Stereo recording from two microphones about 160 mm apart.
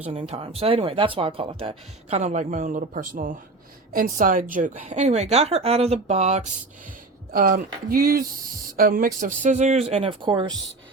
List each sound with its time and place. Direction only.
0.0 s a woman's voice: 40° right (ahead or behind)
7.3 s a woman's voice: 65° right (ahead or behind); by 10.5 s 30° right (ahead or behind)